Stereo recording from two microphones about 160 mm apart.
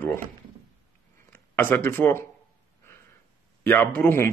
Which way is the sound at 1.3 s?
10° left (ahead or behind).